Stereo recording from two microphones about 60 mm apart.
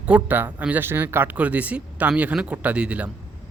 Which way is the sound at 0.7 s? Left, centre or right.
Right.